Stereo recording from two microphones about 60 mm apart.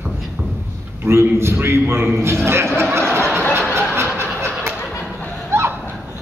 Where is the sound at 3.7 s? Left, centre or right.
Right.